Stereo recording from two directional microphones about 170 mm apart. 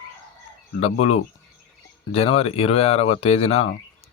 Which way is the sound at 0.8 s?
35° left (ahead or behind).